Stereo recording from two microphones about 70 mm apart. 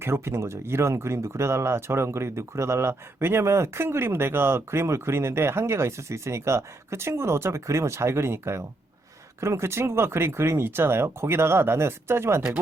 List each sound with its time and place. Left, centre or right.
0.0 s speech: right